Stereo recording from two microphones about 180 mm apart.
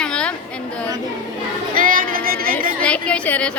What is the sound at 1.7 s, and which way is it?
Speech, 50° right (ahead or behind).